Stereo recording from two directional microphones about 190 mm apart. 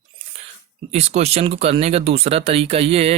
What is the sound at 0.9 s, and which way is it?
Speech, 35° right (ahead or behind).